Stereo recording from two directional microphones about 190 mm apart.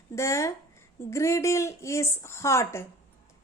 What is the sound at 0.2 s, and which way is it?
A woman's voice, 15° left (ahead or behind).